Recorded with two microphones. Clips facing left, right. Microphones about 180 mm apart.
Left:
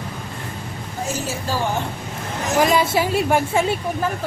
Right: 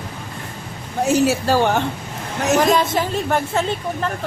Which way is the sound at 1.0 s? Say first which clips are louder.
Right 10 dB; 70° right (ahead or behind).